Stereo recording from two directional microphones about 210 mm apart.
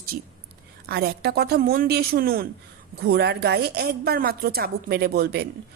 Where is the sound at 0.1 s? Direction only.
40° right (ahead or behind).